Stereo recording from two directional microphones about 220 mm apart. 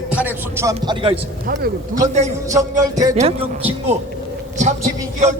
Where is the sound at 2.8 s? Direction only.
15° right (ahead or behind).